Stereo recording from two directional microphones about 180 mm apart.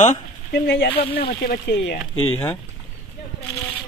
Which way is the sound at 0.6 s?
65° left (ahead or behind).